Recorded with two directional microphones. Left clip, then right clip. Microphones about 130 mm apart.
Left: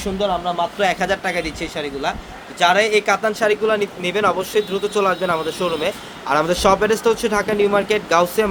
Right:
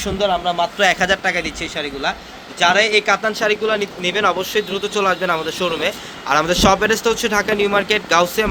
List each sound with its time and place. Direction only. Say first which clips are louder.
0.2 s a man's voice: right 2 dB; 20° right (ahead or behind)
0.8 s speech: right 5 dB; centre (ahead or behind)